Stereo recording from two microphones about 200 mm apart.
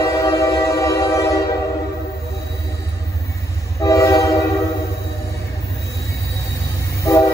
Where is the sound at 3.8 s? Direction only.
15° left (ahead or behind).